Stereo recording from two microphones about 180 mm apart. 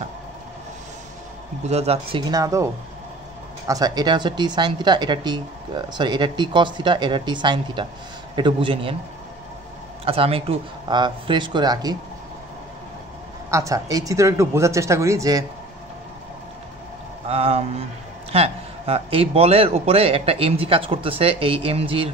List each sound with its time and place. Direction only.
1.7 s speech: 35° right (ahead or behind)
10.0 s speech: 30° right (ahead or behind)
13.5 s speech: 15° right (ahead or behind)
17.3 s a man's voice: 35° right (ahead or behind)